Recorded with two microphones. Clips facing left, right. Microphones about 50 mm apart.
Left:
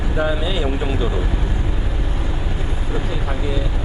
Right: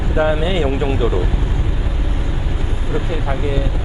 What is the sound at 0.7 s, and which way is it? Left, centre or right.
Speech, centre.